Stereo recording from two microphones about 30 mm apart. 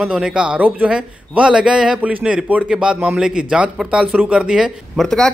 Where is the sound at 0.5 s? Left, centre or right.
Right.